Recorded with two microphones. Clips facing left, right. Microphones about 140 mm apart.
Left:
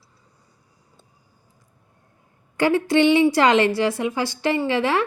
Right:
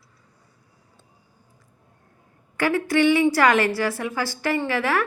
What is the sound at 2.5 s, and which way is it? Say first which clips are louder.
A woman's voice: left 3 dB; 25° left (ahead or behind).